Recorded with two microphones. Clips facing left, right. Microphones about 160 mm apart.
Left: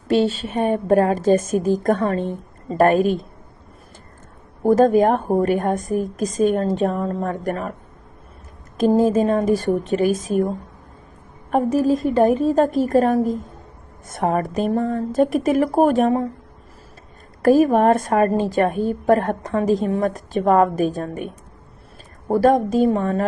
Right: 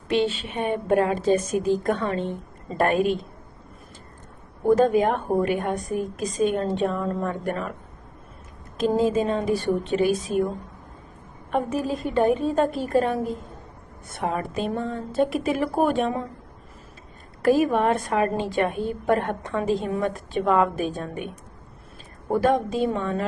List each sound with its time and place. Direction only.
0.1 s a woman's voice: 40° left (ahead or behind)
4.6 s a woman's voice: 40° left (ahead or behind)
8.9 s a woman's voice: 45° left (ahead or behind)
11.5 s a woman's voice: 40° left (ahead or behind)
17.4 s a woman's voice: 45° left (ahead or behind)